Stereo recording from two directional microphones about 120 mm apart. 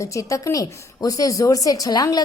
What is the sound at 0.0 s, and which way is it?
A woman's voice, 25° left (ahead or behind).